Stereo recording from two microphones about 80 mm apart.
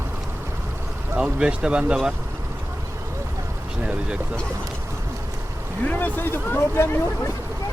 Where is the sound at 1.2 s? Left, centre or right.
Centre.